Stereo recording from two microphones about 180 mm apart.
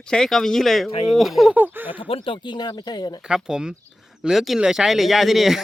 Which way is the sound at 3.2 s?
5° right (ahead or behind).